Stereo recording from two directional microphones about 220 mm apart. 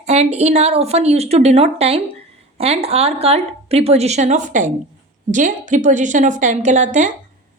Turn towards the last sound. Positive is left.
turn(degrees=-35)  # may be behind; listen again after turning